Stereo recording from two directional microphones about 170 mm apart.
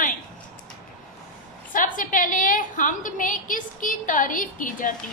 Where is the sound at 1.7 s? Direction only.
50° left (ahead or behind).